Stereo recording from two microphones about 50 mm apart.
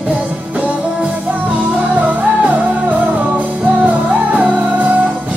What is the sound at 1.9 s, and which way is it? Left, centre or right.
Music, right.